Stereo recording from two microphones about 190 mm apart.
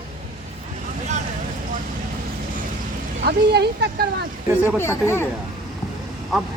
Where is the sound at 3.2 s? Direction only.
60° right (ahead or behind).